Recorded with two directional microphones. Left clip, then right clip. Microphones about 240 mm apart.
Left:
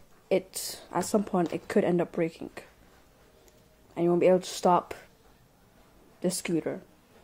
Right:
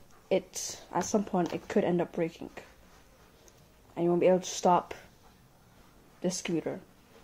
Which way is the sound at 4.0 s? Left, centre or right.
Centre.